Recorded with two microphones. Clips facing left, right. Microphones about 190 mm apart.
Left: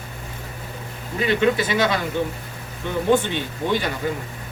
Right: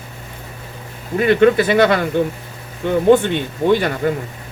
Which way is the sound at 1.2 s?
55° right (ahead or behind).